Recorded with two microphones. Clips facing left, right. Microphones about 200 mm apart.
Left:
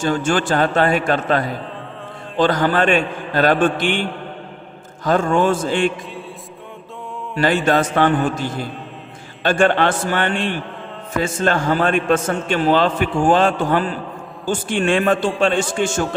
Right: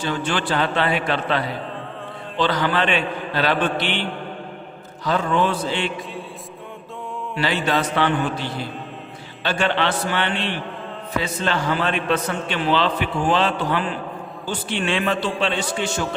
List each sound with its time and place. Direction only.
0.0 s a man's voice: 45° left (ahead or behind)
7.3 s a man's voice: 50° left (ahead or behind)